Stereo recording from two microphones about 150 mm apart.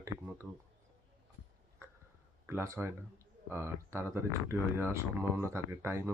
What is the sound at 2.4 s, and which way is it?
Speech, 15° right (ahead or behind).